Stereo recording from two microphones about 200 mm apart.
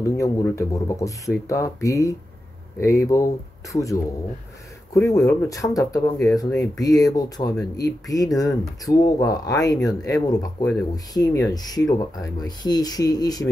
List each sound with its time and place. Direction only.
0.0 s speech: 15° left (ahead or behind)
5.0 s speech: 15° left (ahead or behind)